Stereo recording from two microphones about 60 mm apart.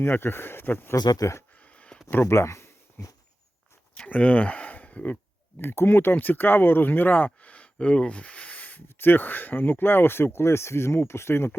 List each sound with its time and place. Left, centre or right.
0.0 s speech: left
0.9 s speech: left
1.6 s a sound: left
2.2 s speech: left
3.9 s speech: left
5.5 s speech: left